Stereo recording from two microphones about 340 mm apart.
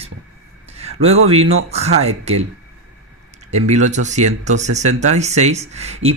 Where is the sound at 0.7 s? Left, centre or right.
Centre.